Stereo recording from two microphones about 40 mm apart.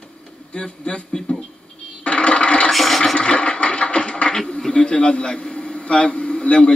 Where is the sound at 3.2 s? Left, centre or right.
Left.